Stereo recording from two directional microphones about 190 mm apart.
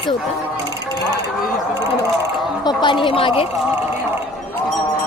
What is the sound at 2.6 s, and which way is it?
Speech, 25° left (ahead or behind).